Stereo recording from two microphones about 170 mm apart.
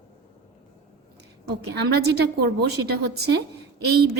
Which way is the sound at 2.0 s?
70° right (ahead or behind).